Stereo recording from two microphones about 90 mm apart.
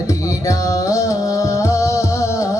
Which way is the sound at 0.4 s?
40° left (ahead or behind).